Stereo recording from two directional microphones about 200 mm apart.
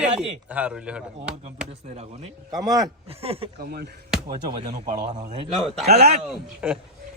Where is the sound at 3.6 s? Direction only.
50° right (ahead or behind).